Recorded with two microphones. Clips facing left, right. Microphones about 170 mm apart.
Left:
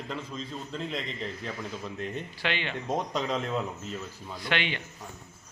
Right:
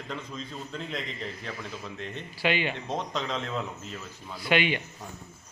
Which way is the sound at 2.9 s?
10° left (ahead or behind).